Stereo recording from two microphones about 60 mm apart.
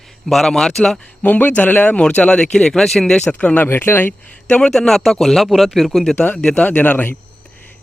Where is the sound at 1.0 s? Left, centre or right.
Left.